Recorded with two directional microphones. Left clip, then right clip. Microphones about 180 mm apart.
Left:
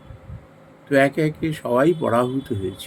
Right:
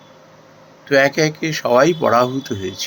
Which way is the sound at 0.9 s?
15° left (ahead or behind).